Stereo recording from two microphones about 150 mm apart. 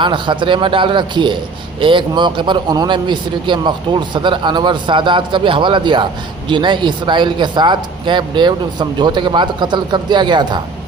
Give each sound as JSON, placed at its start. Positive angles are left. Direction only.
{"t": 0.0, "sound": "a man's voice", "side_deg": -30}